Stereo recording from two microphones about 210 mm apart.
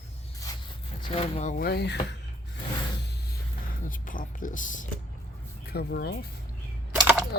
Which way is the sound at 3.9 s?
40° left (ahead or behind).